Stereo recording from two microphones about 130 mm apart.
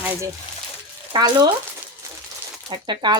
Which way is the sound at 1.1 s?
30° right (ahead or behind).